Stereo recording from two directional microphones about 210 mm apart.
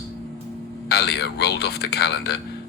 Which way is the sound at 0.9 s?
50° left (ahead or behind).